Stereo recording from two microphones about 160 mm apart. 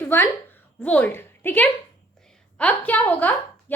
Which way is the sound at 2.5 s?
10° left (ahead or behind).